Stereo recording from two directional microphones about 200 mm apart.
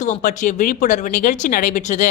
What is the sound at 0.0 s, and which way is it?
Speech, 40° left (ahead or behind).